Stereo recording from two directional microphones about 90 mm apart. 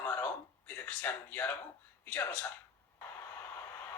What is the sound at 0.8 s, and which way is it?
Speech, 20° left (ahead or behind).